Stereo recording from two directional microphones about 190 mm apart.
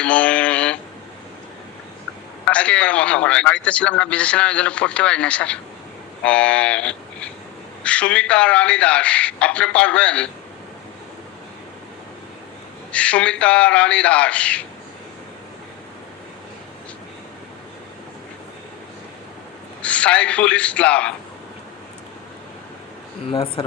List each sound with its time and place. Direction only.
0.0 s a sound: 5° left (ahead or behind)
2.4 s a man's voice: 5° left (ahead or behind)
12.9 s a man's voice: 5° left (ahead or behind)
19.8 s a man's voice: 5° left (ahead or behind)
23.3 s speech: 30° left (ahead or behind)